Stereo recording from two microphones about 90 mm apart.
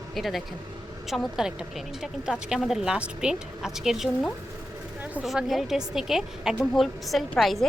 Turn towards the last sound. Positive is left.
turn(degrees=0)  # may be behind; listen again after turning